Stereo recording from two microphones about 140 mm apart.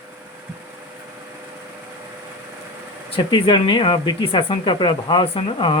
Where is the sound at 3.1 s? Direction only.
35° left (ahead or behind).